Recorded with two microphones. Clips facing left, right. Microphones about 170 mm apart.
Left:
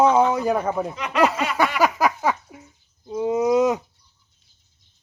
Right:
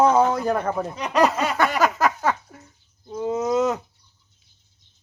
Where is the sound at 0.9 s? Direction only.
35° right (ahead or behind).